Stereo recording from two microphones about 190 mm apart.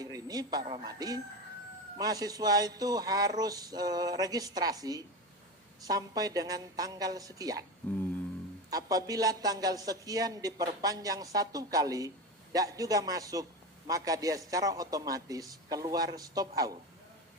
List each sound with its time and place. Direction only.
0.0 s a man's voice: 20° right (ahead or behind)
8.7 s a man's voice: 20° right (ahead or behind)